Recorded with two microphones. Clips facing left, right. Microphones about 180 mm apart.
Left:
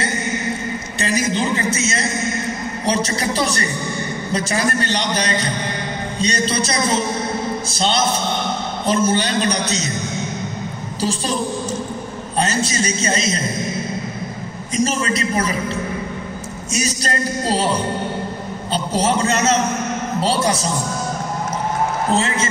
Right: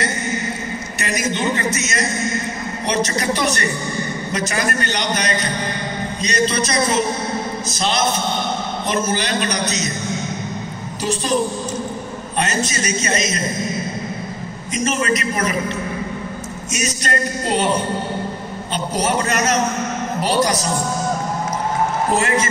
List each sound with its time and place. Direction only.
1.0 s a man's voice: 30° left (ahead or behind)
11.0 s a man's voice: 30° left (ahead or behind)
12.4 s a man's voice: 30° left (ahead or behind)
14.8 s a man's voice: 30° left (ahead or behind)
16.7 s a man's voice: 30° left (ahead or behind)
18.7 s a man's voice: 30° left (ahead or behind)
22.1 s a man's voice: 25° left (ahead or behind)